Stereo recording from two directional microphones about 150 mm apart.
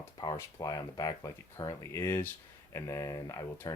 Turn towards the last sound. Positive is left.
turn(degrees=20)  # may be behind; listen again after turning